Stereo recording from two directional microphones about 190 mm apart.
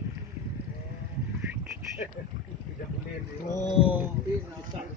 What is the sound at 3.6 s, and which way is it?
Speech, 30° left (ahead or behind).